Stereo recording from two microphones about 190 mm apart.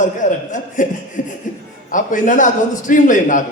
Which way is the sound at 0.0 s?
45° left (ahead or behind).